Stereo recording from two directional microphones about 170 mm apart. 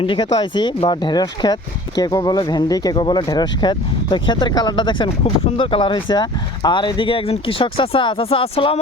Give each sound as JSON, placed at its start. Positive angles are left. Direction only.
{"t": 0.0, "sound": "speech", "side_deg": 30}